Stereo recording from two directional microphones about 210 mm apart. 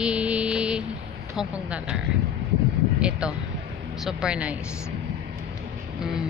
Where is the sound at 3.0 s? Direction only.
5° right (ahead or behind).